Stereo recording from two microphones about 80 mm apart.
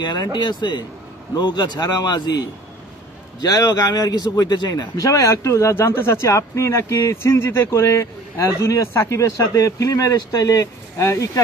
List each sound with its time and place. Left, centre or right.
0.0 s a man's voice: left